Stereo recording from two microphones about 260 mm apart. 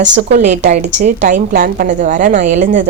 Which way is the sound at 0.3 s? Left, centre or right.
Right.